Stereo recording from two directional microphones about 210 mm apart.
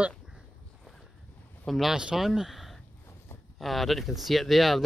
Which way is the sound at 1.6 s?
Centre (ahead or behind).